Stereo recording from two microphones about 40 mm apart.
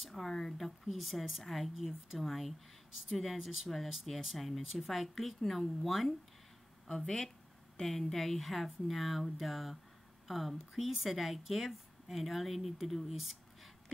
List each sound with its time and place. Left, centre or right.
0.0 s a woman's voice: centre
6.9 s a woman's voice: centre